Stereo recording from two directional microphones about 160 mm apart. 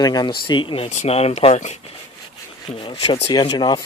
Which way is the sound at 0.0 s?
25° left (ahead or behind).